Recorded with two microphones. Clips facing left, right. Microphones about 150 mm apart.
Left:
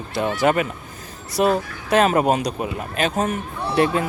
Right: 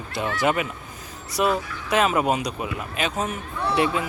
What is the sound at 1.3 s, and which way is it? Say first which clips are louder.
Speech: left 4 dB; 40° left (ahead or behind).